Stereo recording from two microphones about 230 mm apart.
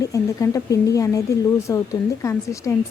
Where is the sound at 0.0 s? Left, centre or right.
Centre.